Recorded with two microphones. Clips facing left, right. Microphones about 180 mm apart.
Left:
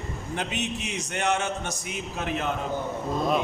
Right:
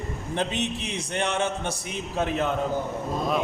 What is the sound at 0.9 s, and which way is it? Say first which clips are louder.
Speech: left 2 dB; 30° right (ahead or behind).